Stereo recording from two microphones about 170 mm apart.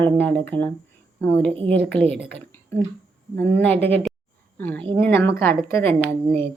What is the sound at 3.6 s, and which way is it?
Speech, 10° left (ahead or behind).